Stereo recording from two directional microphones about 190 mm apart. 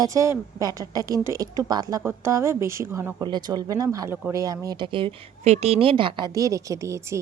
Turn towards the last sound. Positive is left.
turn(degrees=-15)  # may be behind; listen again after turning